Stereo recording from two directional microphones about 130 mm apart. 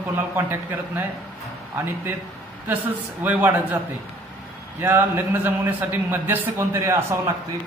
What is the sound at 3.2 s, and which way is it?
Speech, 15° right (ahead or behind).